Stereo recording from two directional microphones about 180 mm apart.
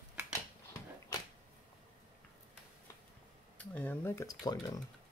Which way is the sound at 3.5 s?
10° left (ahead or behind).